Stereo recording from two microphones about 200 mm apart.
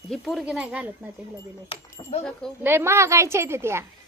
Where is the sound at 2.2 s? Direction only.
5° left (ahead or behind).